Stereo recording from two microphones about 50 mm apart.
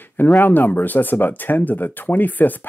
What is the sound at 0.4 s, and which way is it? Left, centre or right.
Speech, left.